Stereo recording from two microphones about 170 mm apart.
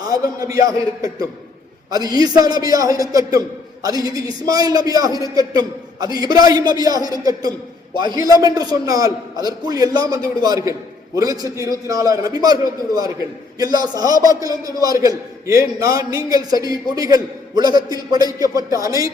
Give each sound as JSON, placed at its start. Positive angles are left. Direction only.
{"t": 0.0, "sound": "a man's voice", "side_deg": -20}